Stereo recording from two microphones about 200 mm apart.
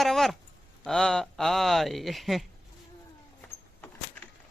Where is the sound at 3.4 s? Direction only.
10° left (ahead or behind).